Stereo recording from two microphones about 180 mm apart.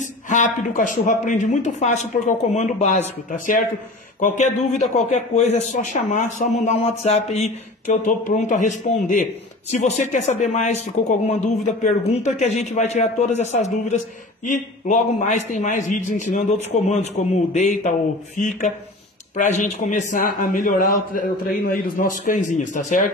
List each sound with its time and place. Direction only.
0.3 s speech: 45° left (ahead or behind)
19.3 s speech: 40° left (ahead or behind)